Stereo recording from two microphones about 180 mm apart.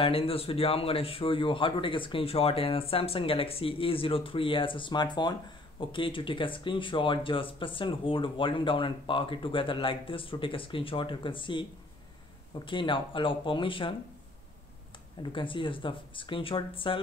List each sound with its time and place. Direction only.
0.0 s speech: 30° left (ahead or behind)
15.3 s speech: 30° left (ahead or behind)